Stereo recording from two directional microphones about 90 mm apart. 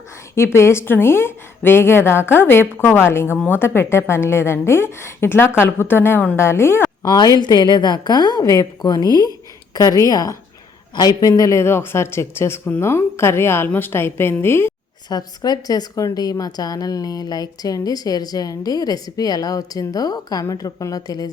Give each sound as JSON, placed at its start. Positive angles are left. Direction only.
{"t": 0.3, "sound": "a woman's voice", "side_deg": 30}
{"t": 7.0, "sound": "a woman's voice", "side_deg": 50}
{"t": 15.1, "sound": "speech", "side_deg": 50}